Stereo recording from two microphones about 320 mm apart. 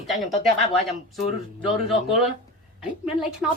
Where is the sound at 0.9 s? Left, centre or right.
Centre.